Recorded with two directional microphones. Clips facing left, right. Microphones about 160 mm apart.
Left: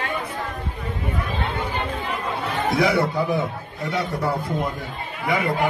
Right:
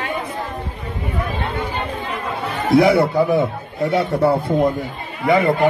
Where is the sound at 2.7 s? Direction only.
30° right (ahead or behind).